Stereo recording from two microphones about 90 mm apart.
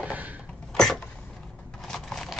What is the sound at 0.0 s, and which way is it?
Cough, 15° right (ahead or behind).